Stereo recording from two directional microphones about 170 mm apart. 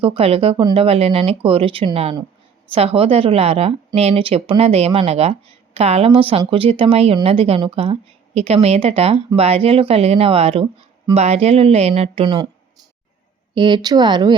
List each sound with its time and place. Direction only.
0.0 s a woman's voice: 35° right (ahead or behind)
12.2 s speech: 25° right (ahead or behind)
13.5 s speech: 30° right (ahead or behind)